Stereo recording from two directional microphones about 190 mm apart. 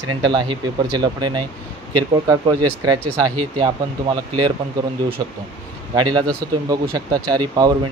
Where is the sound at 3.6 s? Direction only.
25° right (ahead or behind).